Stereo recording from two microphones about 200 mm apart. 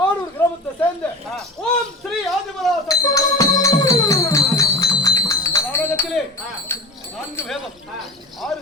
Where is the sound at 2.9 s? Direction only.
15° left (ahead or behind).